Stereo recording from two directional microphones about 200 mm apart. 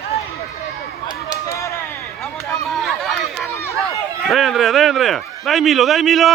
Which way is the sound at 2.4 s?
15° left (ahead or behind).